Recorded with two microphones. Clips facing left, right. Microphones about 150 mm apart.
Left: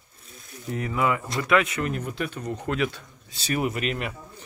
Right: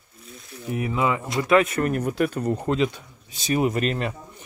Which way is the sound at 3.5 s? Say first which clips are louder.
Right 4 dB; 30° right (ahead or behind).